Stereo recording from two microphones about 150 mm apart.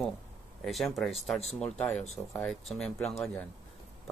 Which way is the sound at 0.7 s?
Centre (ahead or behind).